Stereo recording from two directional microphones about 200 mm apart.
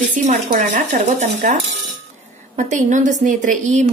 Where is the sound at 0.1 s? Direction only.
40° right (ahead or behind).